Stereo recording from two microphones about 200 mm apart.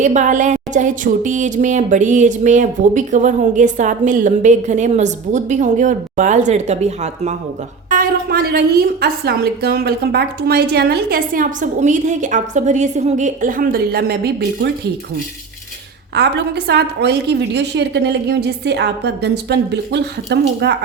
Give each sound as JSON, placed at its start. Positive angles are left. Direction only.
{"t": 0.0, "sound": "speech", "side_deg": -40}
{"t": 7.9, "sound": "a woman's voice", "side_deg": -45}
{"t": 16.1, "sound": "a woman's voice", "side_deg": -55}